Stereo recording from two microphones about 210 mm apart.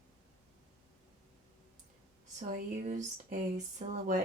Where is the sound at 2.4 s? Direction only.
35° right (ahead or behind).